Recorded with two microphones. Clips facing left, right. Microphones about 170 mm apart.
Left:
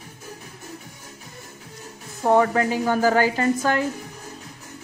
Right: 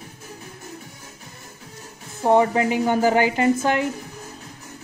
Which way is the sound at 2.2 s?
20° right (ahead or behind).